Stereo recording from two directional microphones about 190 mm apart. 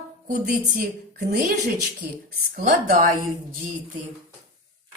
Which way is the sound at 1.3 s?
50° right (ahead or behind).